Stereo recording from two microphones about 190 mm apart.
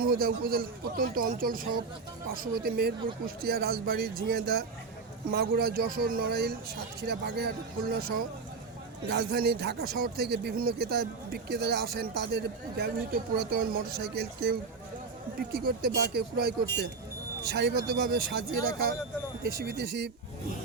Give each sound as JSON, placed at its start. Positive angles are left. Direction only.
{"t": 0.0, "sound": "a man's voice", "side_deg": -50}